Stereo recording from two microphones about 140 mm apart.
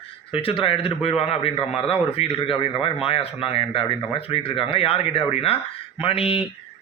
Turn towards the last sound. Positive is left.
turn(degrees=40)  # may be behind; listen again after turning